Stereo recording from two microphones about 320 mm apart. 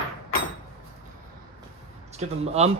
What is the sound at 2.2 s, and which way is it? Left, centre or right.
Speech, centre.